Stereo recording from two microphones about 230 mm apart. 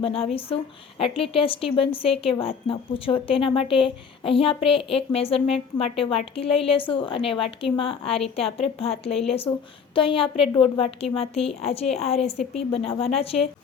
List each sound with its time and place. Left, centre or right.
0.0 s a woman's voice: left